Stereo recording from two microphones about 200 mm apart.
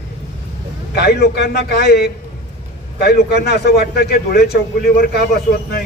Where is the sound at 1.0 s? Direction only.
55° left (ahead or behind).